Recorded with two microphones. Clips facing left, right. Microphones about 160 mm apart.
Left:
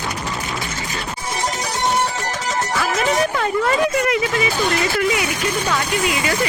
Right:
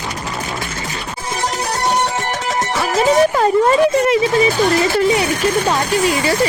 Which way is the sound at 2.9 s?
30° right (ahead or behind).